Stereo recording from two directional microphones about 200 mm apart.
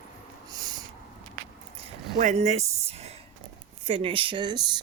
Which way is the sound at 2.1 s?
35° right (ahead or behind).